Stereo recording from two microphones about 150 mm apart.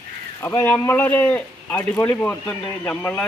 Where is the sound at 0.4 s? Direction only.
15° left (ahead or behind).